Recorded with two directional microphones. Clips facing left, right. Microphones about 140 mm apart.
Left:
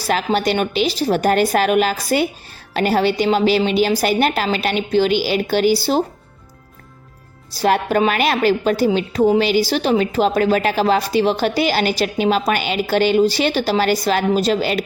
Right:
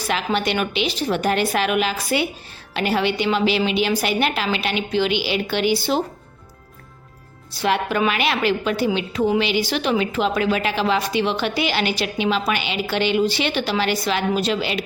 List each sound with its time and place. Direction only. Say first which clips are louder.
0.0 s a woman's voice: left 4 dB; 40° left (ahead or behind)
7.5 s a woman's voice: left 4 dB; 40° left (ahead or behind)